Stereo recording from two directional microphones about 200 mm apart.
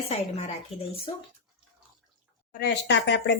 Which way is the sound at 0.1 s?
35° left (ahead or behind).